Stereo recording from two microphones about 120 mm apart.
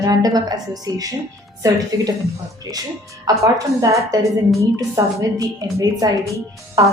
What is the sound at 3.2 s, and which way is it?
A woman's voice, 25° right (ahead or behind).